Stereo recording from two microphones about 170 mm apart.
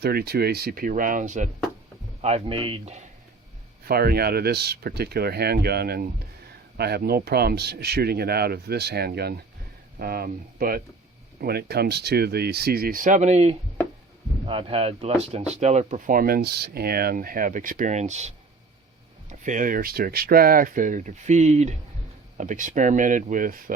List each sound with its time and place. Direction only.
0.0 s speech: 70° right (ahead or behind); by 1.5 s 50° right (ahead or behind)
2.2 s speech: 35° right (ahead or behind)
3.8 s speech: 65° right (ahead or behind)